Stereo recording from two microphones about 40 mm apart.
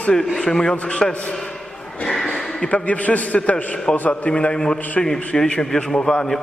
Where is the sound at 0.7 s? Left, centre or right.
Left.